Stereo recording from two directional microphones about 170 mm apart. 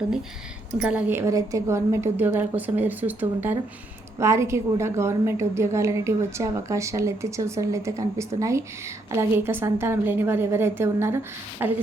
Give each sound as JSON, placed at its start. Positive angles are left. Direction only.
{"t": 0.8, "sound": "a woman's voice", "side_deg": -5}
{"t": 1.2, "sound": "a woman's voice", "side_deg": -20}